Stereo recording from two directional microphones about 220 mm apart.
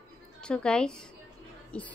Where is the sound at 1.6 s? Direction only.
5° left (ahead or behind).